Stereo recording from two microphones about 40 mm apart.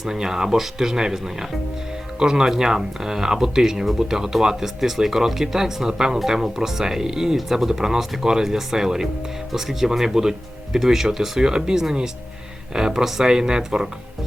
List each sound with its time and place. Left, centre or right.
0.0 s speech: centre